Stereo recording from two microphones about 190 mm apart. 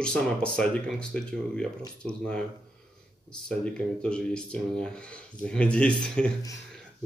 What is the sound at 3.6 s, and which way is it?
Speech, 5° left (ahead or behind).